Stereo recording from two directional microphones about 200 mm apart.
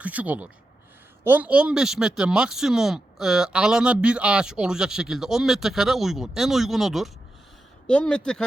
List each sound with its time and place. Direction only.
0.0 s speech: 5° right (ahead or behind)